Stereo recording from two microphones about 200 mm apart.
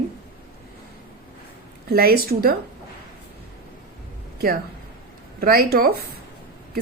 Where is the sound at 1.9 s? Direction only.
50° right (ahead or behind).